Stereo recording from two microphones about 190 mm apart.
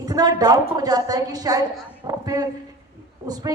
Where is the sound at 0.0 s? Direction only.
20° right (ahead or behind).